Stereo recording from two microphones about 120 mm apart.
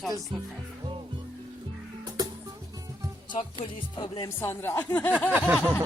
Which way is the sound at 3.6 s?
45° left (ahead or behind).